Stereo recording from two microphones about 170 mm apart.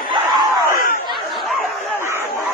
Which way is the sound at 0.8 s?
55° left (ahead or behind).